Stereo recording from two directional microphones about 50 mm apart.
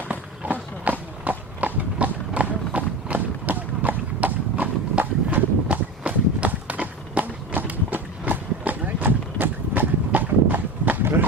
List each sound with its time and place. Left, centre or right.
0.1 s clip-clop: right
5.6 s walk: right